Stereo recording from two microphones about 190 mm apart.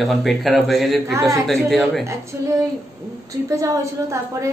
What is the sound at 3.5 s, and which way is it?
A woman's voice, 15° right (ahead or behind).